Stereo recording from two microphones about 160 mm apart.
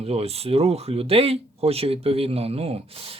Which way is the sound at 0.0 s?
40° right (ahead or behind).